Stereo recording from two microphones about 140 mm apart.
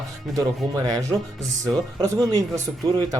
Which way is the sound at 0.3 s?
25° right (ahead or behind).